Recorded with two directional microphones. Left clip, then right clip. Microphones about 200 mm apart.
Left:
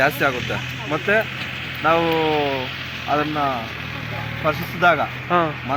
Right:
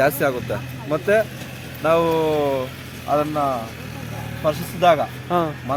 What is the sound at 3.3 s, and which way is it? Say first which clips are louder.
Speech: even; 25° right (ahead or behind).